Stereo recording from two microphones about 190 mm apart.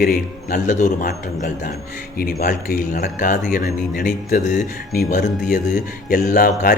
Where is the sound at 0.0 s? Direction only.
45° left (ahead or behind).